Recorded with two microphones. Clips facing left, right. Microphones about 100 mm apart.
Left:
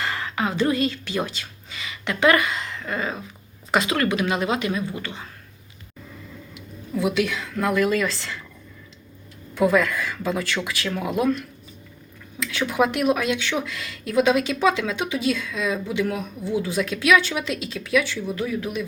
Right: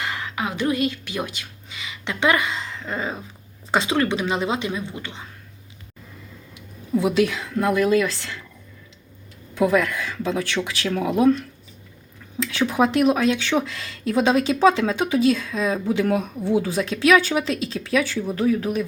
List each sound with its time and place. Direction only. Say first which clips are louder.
0.0 s a woman's voice: left 2 dB; 10° right (ahead or behind)
6.9 s a woman's voice: right 3 dB; 30° right (ahead or behind); by 8.4 s 15° right (ahead or behind)
9.6 s a woman's voice: even; 20° right (ahead or behind); by 16.6 s 55° right (ahead or behind)
16.6 s speech: even; 30° right (ahead or behind)